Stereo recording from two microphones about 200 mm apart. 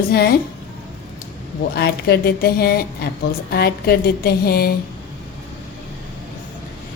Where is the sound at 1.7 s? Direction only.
55° left (ahead or behind).